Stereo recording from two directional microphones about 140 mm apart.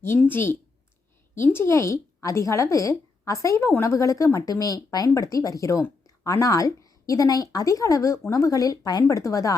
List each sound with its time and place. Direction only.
0.2 s a woman's voice: 15° left (ahead or behind)